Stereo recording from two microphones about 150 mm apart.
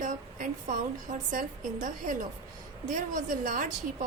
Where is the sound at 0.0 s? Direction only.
60° right (ahead or behind).